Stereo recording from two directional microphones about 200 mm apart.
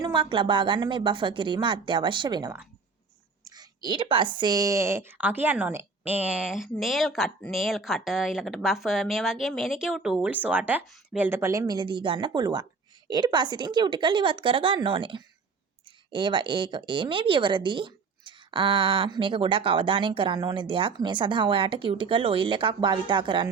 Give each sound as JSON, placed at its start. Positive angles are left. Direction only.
{"t": 0.0, "sound": "speech", "side_deg": -25}